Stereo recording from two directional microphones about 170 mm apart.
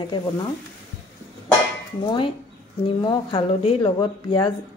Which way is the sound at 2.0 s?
25° left (ahead or behind).